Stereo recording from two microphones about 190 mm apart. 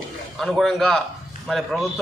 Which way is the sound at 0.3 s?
Centre (ahead or behind).